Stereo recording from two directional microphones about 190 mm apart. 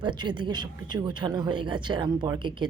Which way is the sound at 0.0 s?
25° right (ahead or behind).